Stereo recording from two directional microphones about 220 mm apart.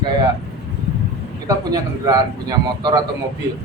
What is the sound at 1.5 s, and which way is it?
A man's voice, 15° right (ahead or behind).